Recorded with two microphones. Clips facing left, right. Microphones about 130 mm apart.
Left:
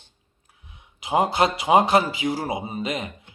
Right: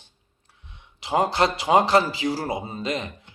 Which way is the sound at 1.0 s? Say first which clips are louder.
Left 1 dB; 20° left (ahead or behind).